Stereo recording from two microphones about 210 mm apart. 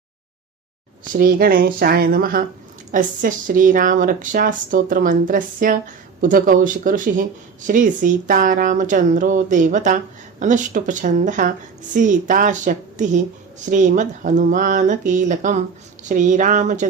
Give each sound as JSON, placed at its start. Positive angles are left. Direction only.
{"t": 1.0, "sound": "speech", "side_deg": -40}